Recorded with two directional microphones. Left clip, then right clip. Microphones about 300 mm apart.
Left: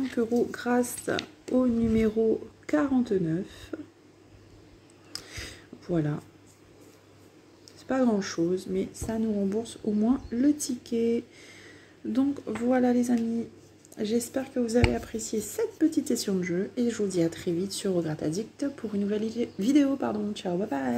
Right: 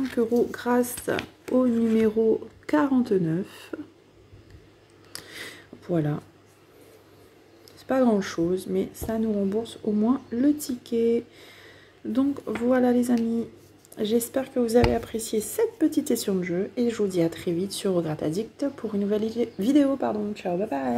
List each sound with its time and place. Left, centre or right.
0.1 s speech: centre
5.1 s a sound: centre
7.8 s speech: centre